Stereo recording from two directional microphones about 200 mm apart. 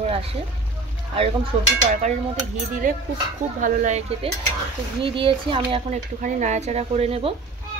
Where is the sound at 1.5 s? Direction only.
30° right (ahead or behind).